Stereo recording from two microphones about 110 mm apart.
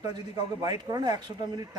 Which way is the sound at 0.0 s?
35° right (ahead or behind).